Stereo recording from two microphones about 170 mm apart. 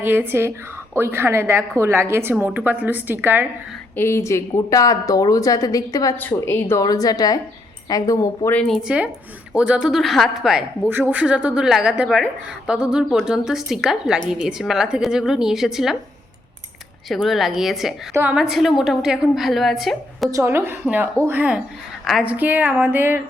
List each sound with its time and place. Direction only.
0.0 s a woman's voice: 10° right (ahead or behind)
3.9 s a woman's voice: 15° left (ahead or behind)
8.5 s a woman's voice: centre (ahead or behind)
17.1 s a woman's voice: centre (ahead or behind)
20.3 s a woman's voice: 15° right (ahead or behind)